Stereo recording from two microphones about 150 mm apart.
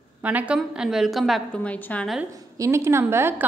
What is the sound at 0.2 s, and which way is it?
A woman's voice, 10° right (ahead or behind).